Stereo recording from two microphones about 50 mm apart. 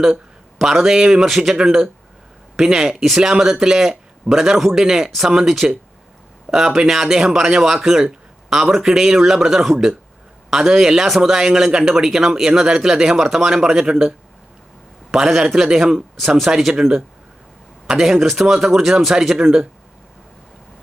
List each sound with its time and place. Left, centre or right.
0.6 s speech: centre
1.2 s speech: centre
3.2 s speech: centre
6.8 s speech: centre
15.1 s speech: centre